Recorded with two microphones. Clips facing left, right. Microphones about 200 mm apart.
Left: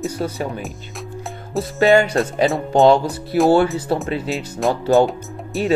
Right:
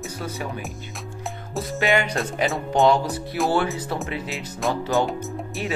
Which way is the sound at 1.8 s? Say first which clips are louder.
Left 8 dB; 35° left (ahead or behind).